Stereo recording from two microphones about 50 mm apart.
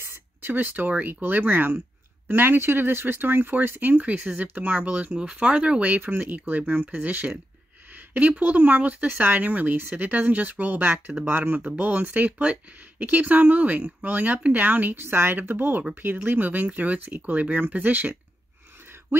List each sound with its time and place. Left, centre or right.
0.0 s a sound: right
0.5 s speech: right
5.2 s speech: centre
5.9 s speech: right
12.3 s speech: right
13.1 s speech: right
15.0 s speech: right